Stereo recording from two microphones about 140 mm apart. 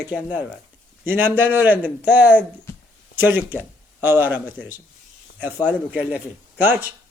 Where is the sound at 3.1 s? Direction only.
15° right (ahead or behind).